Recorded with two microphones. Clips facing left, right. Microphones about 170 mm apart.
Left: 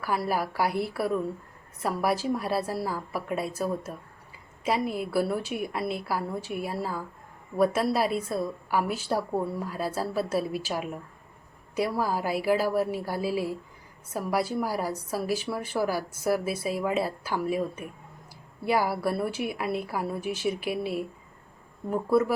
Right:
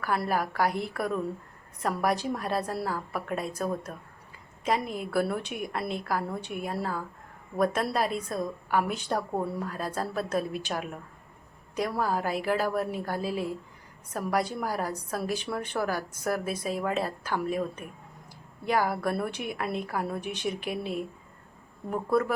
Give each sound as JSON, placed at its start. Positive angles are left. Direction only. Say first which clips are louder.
{"t": 0.0, "sound": "a woman's voice", "louder": "even", "side_deg": 10}